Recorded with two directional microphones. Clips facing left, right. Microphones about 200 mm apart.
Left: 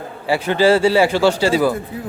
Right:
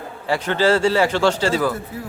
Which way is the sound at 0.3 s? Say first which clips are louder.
Left 3 dB; 10° left (ahead or behind).